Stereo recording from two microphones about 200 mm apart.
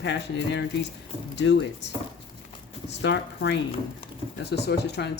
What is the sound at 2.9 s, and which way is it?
A woman's voice, 60° left (ahead or behind).